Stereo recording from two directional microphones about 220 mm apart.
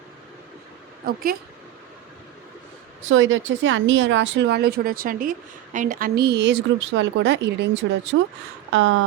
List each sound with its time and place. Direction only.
1.0 s speech: 40° right (ahead or behind)
3.0 s speech: 60° right (ahead or behind)
8.7 s speech: 65° right (ahead or behind)